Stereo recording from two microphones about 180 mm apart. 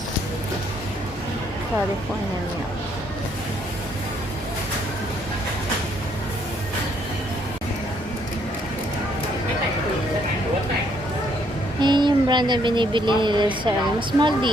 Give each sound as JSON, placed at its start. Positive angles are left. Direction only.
{"t": 11.8, "sound": "speech", "side_deg": -25}